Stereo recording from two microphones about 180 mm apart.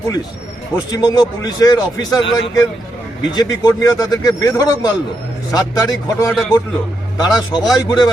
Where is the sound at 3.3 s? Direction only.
20° left (ahead or behind).